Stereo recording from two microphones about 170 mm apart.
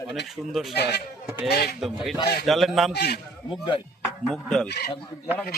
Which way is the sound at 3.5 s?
30° left (ahead or behind).